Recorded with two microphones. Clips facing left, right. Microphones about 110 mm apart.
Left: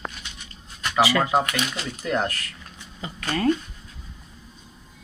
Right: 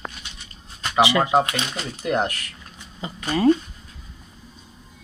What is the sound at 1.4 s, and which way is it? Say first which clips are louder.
Speech: right 1 dB; 25° right (ahead or behind).